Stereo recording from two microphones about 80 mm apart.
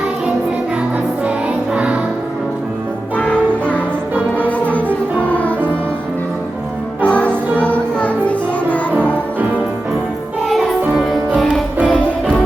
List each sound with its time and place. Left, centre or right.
1.7 s music: centre
3.2 s music: centre
7.0 s music: centre
10.5 s music: centre
11.9 s music: centre